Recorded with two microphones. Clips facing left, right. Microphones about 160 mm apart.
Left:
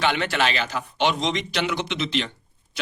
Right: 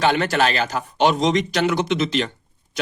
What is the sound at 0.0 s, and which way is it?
Speech, 40° right (ahead or behind).